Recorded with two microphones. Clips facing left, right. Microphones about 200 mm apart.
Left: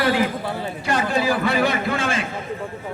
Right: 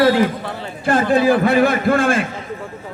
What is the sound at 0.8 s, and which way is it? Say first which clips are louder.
A man's voice: right 7 dB; 50° right (ahead or behind).